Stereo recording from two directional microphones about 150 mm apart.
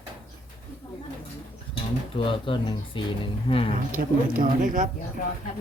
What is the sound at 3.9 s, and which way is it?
Speech, 65° right (ahead or behind).